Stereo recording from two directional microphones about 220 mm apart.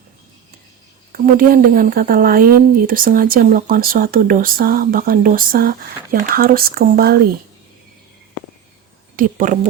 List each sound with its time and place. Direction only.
1.1 s speech: 40° right (ahead or behind)
9.1 s speech: 35° right (ahead or behind)